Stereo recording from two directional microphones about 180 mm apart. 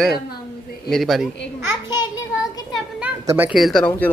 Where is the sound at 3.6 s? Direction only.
Centre (ahead or behind).